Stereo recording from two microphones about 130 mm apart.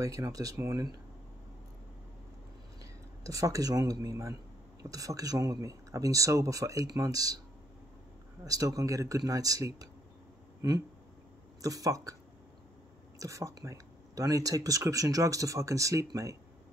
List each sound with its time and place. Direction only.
0.0 s speech: 25° right (ahead or behind)
2.8 s speech: 25° right (ahead or behind)
8.5 s speech: 25° right (ahead or behind)
11.6 s speech: 25° right (ahead or behind)
13.2 s speech: 25° right (ahead or behind)